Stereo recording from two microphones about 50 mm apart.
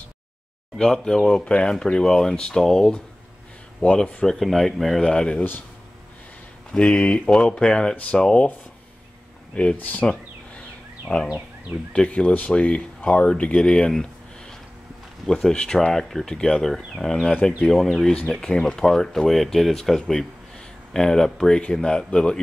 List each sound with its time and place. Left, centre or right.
0.7 s speech: centre
4.4 s speech: centre
5.0 s speech: centre
6.8 s speech: left
9.5 s speech: left
11.1 s wild animals: right
12.1 s speech: left
15.2 s speech: centre
15.9 s speech: centre
18.3 s speech: centre